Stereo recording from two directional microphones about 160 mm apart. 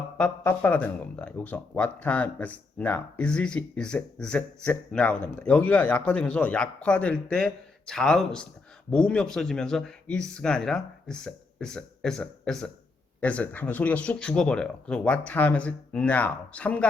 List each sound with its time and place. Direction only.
0.2 s speech: 10° left (ahead or behind)